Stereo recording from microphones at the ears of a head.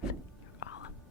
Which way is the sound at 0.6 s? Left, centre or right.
Left.